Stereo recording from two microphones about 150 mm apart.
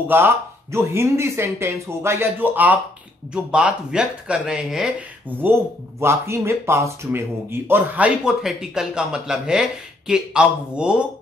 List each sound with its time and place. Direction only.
0.1 s speech: 15° right (ahead or behind)
5.4 s speech: 15° right (ahead or behind)